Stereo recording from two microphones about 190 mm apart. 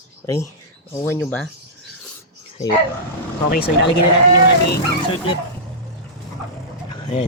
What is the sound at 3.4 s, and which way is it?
Speech, 55° left (ahead or behind).